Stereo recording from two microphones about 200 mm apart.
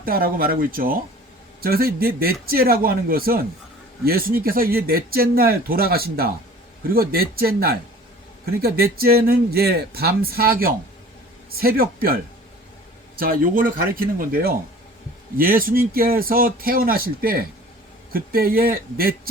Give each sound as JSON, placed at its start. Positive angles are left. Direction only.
{"t": 0.0, "sound": "speech", "side_deg": -45}